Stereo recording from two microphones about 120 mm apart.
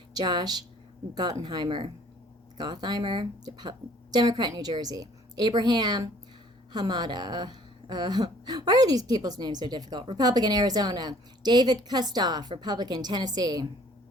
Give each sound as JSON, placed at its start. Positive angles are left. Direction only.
{"t": 0.1, "sound": "a woman's voice", "side_deg": -35}